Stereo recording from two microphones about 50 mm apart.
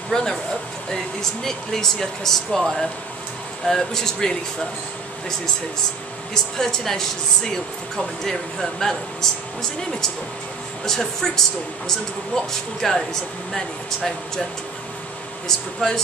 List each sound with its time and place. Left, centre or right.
0.1 s speech: centre
3.6 s speech: centre
6.3 s speech: centre
15.4 s speech: centre